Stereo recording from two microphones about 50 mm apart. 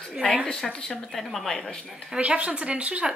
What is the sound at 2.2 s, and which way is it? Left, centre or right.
Speech, right.